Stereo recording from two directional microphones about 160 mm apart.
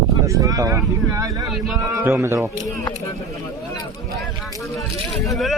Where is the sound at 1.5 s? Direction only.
Centre (ahead or behind).